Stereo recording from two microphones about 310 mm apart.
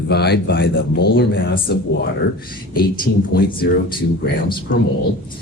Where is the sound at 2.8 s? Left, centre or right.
Left.